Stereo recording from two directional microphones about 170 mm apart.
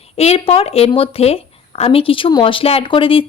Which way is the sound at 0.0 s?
35° left (ahead or behind).